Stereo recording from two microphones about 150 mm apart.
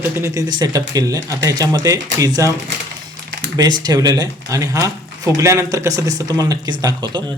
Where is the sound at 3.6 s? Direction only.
30° right (ahead or behind).